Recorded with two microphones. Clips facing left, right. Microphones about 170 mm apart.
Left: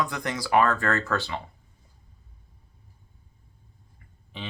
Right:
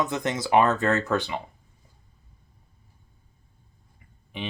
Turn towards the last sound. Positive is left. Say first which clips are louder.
# right 4 dB
turn(degrees=-15)  # may be behind; listen again after turning